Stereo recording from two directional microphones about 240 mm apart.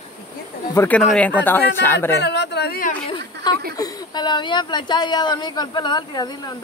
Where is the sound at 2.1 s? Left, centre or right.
Left.